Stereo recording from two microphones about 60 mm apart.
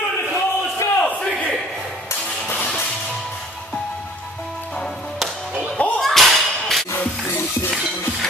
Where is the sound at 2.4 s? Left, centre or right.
Left.